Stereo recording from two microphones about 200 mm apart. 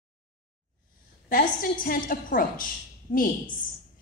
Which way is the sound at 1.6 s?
45° left (ahead or behind).